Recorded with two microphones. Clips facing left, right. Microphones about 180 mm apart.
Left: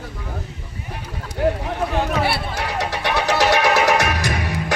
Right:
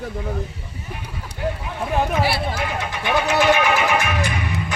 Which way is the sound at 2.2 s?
65° left (ahead or behind).